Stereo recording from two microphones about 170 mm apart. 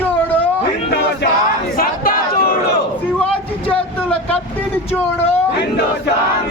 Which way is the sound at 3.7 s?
10° left (ahead or behind).